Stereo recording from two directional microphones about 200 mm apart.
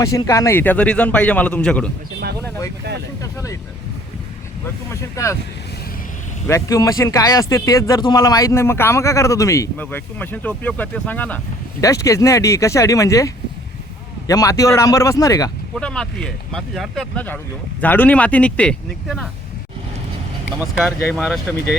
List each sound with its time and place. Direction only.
0.0 s speech: 15° left (ahead or behind)
4.6 s speech: 15° left (ahead or behind)
6.5 s speech: 15° left (ahead or behind)
15.7 s speech: 5° left (ahead or behind)
20.6 s speech: 5° right (ahead or behind)